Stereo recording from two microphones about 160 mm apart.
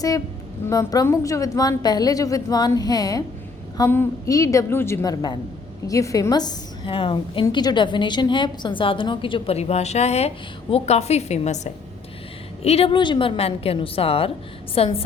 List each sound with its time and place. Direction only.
0.7 s a woman's voice: 20° left (ahead or behind); by 15.0 s 35° left (ahead or behind)